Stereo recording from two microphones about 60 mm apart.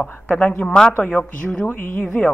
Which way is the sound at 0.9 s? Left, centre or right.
Left.